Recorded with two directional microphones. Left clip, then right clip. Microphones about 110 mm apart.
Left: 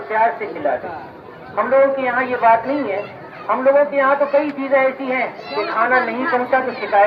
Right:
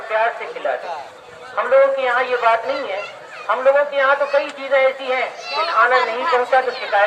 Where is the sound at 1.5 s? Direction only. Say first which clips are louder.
Even; 35° right (ahead or behind).